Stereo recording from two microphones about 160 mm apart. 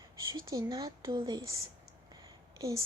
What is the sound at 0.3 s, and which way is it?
Speech, 25° right (ahead or behind).